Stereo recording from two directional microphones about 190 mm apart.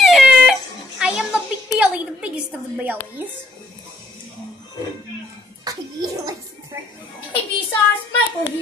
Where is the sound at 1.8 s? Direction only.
5° right (ahead or behind).